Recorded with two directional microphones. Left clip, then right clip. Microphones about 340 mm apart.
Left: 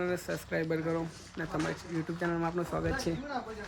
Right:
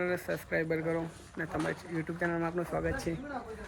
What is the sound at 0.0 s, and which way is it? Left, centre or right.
Speech, centre.